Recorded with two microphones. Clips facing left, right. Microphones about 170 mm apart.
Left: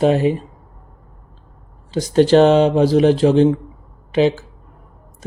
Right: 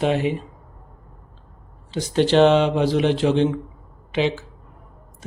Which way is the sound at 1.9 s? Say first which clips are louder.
Left 6 dB; 40° left (ahead or behind).